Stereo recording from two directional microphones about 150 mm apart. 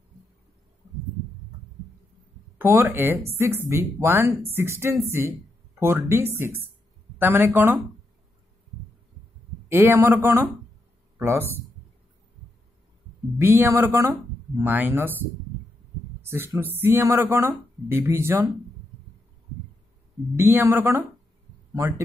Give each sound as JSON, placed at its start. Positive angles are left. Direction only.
{"t": 2.6, "sound": "speech", "side_deg": -15}
{"t": 9.7, "sound": "speech", "side_deg": -15}
{"t": 13.4, "sound": "speech", "side_deg": -15}
{"t": 16.3, "sound": "speech", "side_deg": -15}
{"t": 20.3, "sound": "speech", "side_deg": -15}